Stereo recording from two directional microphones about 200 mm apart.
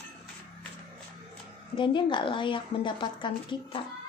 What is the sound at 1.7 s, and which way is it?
Speech, 25° left (ahead or behind).